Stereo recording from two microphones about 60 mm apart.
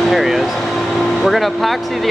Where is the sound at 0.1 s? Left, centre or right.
Centre.